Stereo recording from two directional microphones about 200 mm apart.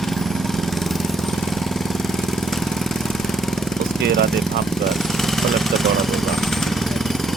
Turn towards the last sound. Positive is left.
turn(degrees=0)  # may be behind; listen again after turning